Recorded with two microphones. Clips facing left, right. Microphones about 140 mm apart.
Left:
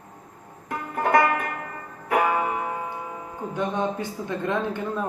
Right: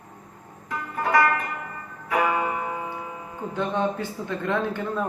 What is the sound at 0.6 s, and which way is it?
Music, 50° left (ahead or behind).